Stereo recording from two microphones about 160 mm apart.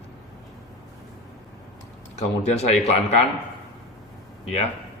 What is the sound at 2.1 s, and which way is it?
Speech, 40° left (ahead or behind).